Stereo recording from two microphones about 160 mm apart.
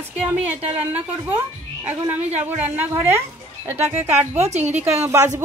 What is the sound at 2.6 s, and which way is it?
A woman's voice, 10° right (ahead or behind).